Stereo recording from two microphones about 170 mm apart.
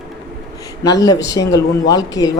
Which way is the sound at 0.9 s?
20° left (ahead or behind).